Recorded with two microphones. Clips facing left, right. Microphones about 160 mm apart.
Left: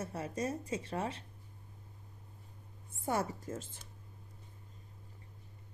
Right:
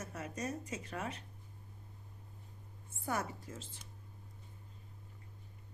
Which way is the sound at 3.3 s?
45° left (ahead or behind).